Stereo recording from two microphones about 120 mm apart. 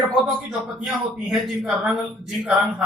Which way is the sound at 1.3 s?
5° right (ahead or behind).